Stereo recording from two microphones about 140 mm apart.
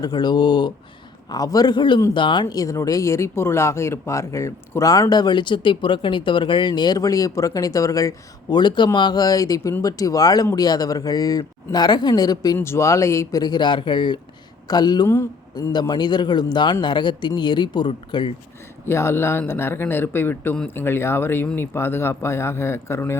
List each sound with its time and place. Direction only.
0.0 s speech: 30° left (ahead or behind)
18.9 s speech: 20° left (ahead or behind)